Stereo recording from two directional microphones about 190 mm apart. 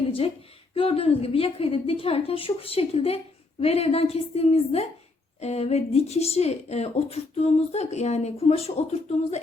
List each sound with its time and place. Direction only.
0.7 s speech: 30° left (ahead or behind)